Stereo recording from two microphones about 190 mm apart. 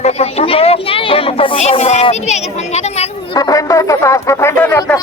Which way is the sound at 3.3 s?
20° left (ahead or behind).